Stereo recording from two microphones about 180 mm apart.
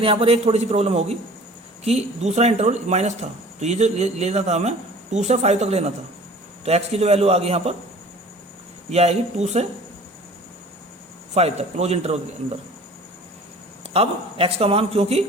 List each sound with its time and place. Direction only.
0.0 s speech: 30° right (ahead or behind)
8.9 s speech: 35° right (ahead or behind)
11.3 s speech: 35° right (ahead or behind)
13.9 s speech: 30° right (ahead or behind)